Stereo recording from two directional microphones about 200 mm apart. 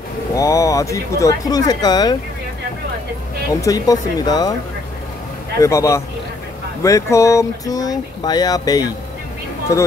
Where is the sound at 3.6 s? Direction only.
15° left (ahead or behind).